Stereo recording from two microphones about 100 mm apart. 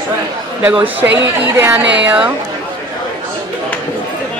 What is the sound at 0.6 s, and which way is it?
Speech, 20° right (ahead or behind).